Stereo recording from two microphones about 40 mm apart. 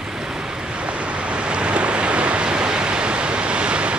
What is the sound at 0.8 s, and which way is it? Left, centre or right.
Waves, right.